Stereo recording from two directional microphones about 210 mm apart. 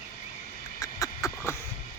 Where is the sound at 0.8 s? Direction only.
15° left (ahead or behind).